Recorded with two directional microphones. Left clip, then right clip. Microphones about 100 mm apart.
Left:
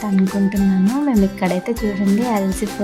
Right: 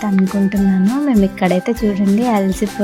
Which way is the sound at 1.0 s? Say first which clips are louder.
Right 5 dB; 40° right (ahead or behind).